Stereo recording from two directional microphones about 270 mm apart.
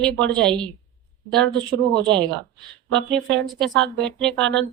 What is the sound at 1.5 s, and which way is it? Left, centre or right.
Speech, centre.